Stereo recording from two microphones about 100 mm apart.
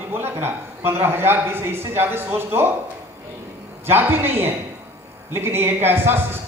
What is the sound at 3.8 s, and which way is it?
Speech, 20° right (ahead or behind).